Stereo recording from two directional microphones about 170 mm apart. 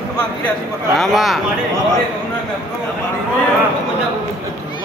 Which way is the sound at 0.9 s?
Centre (ahead or behind).